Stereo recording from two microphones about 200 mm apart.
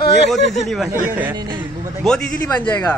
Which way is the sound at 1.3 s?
20° right (ahead or behind).